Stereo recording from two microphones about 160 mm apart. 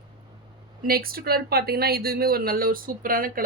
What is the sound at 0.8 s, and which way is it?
Speech, 70° right (ahead or behind).